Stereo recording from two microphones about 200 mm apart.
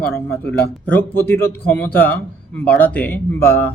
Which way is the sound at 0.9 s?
10° left (ahead or behind).